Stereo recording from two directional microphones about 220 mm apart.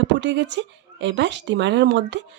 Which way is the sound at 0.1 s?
55° right (ahead or behind).